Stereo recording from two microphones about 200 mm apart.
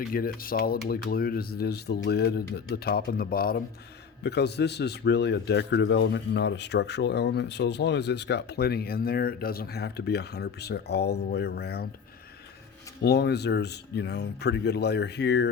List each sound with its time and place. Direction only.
0.1 s a man's voice: 45° left (ahead or behind)
13.0 s a man's voice: 55° left (ahead or behind)